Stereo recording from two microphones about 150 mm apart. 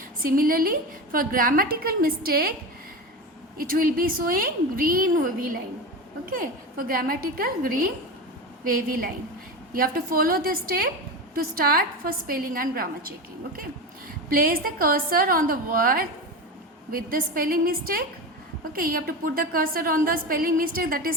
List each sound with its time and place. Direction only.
0.2 s a woman's voice: 70° right (ahead or behind); by 2.5 s 90° right
3.6 s a woman's voice: 75° right (ahead or behind)
14.3 s a woman's voice: 75° right (ahead or behind)